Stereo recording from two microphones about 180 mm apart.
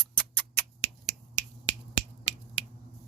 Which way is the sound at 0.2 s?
10° left (ahead or behind).